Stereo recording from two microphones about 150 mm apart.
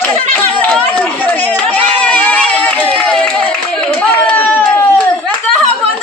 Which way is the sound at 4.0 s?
10° left (ahead or behind).